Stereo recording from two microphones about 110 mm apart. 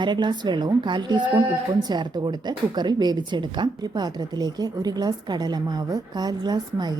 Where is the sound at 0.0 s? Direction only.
45° right (ahead or behind).